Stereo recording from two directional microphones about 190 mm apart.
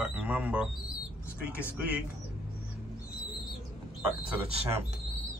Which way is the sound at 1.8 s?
10° right (ahead or behind).